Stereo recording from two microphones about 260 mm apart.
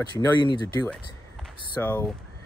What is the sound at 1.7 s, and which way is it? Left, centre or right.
Speech, centre.